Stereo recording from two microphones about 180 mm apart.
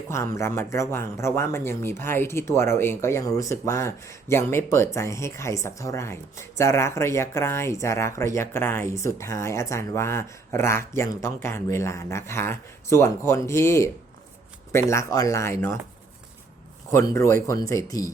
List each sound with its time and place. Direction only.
0.1 s speech: 15° left (ahead or behind)
16.9 s speech: 15° left (ahead or behind)